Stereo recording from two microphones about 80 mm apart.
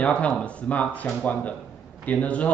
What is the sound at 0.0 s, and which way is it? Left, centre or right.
Speech, centre.